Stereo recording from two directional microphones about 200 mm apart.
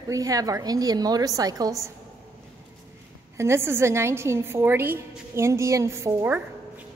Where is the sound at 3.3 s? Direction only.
15° right (ahead or behind).